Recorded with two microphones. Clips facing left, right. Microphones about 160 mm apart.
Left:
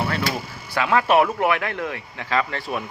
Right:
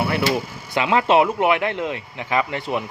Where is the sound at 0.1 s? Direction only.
15° right (ahead or behind).